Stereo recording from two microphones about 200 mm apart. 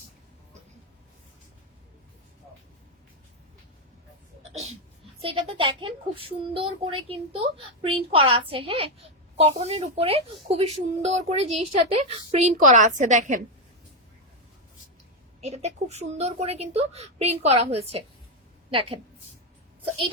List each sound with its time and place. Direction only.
4.5 s a sound: 35° right (ahead or behind)
5.2 s speech: 25° right (ahead or behind)
15.4 s speech: 35° right (ahead or behind)